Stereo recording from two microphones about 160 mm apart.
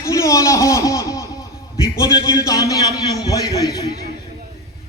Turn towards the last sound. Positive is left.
turn(degrees=25)  # may be behind; listen again after turning